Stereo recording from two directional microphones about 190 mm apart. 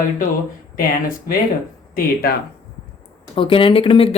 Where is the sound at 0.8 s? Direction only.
45° left (ahead or behind).